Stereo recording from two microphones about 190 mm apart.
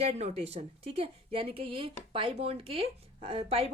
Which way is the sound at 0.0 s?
35° right (ahead or behind).